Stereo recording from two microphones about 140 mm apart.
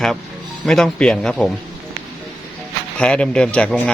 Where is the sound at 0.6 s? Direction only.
Centre (ahead or behind).